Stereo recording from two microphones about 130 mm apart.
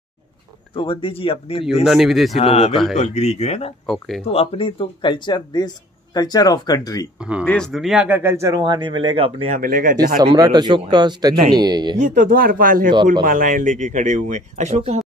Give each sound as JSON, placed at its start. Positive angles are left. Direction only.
{"t": 0.7, "sound": "speech", "side_deg": 40}
{"t": 1.9, "sound": "speech", "side_deg": 0}
{"t": 2.4, "sound": "speech", "side_deg": 50}
{"t": 3.8, "sound": "speech", "side_deg": 5}
{"t": 4.3, "sound": "speech", "side_deg": 45}
{"t": 7.2, "sound": "speech", "side_deg": -10}
{"t": 7.4, "sound": "speech", "side_deg": 5}
{"t": 9.5, "sound": "speech", "side_deg": -90}
{"t": 10.3, "sound": "speech", "side_deg": -35}
{"t": 12.0, "sound": "speech", "side_deg": -80}